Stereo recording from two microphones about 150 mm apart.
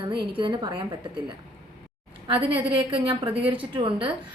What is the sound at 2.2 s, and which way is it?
A woman's voice, 35° right (ahead or behind).